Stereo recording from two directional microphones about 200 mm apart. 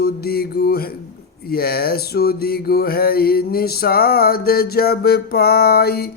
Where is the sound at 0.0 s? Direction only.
50° left (ahead or behind).